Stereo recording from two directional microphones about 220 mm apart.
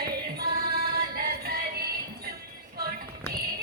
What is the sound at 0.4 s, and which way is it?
Music, 45° right (ahead or behind).